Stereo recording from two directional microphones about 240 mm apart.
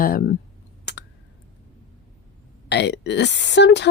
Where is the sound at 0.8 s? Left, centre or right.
Left.